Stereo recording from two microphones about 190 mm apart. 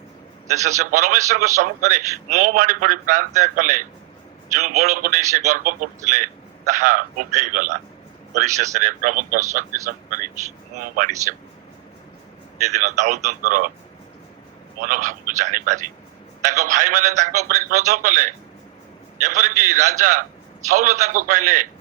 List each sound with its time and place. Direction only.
0.8 s a man's voice: 45° right (ahead or behind)
12.8 s a man's voice: 45° right (ahead or behind)
14.8 s a man's voice: 45° right (ahead or behind)